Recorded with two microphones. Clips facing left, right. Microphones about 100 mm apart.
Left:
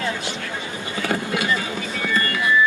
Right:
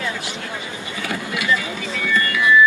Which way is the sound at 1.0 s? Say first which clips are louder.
Left 3 dB; 40° left (ahead or behind).